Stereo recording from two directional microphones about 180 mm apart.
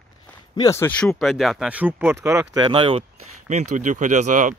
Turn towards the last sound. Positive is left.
turn(degrees=-45)  # may be behind; listen again after turning